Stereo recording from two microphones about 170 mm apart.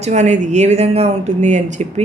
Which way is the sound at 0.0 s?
45° right (ahead or behind).